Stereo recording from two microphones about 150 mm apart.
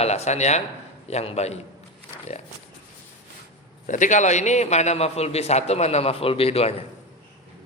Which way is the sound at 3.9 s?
55° left (ahead or behind).